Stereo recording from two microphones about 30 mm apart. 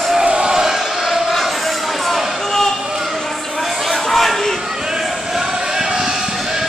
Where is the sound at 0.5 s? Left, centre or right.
Centre.